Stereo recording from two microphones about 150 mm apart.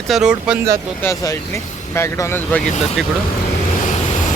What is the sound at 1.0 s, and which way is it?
Speech, 20° left (ahead or behind).